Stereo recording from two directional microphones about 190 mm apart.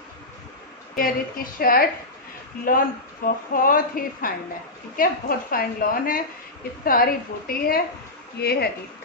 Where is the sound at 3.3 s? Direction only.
50° left (ahead or behind).